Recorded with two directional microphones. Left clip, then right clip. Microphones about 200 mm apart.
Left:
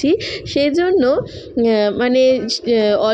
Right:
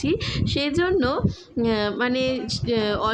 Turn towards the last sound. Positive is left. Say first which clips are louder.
# left 9 dB
turn(degrees=15)  # may be behind; listen again after turning